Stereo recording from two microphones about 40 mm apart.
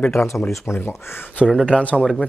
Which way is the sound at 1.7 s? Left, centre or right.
Left.